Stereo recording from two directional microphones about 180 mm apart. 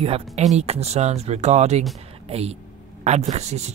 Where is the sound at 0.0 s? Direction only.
35° right (ahead or behind).